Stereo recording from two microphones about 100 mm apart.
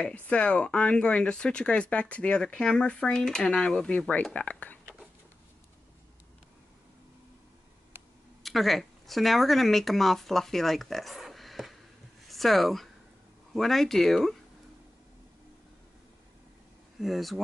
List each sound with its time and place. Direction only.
0.0 s speech: 10° left (ahead or behind)
8.4 s speech: centre (ahead or behind)
17.0 s speech: centre (ahead or behind)